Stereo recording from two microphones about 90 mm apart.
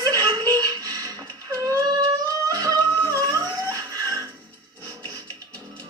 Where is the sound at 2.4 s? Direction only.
45° right (ahead or behind).